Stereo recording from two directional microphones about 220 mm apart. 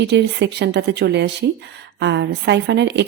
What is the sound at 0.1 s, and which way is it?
Speech, 50° right (ahead or behind).